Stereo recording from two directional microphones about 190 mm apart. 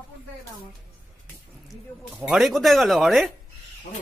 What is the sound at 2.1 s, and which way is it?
Speech, centre (ahead or behind).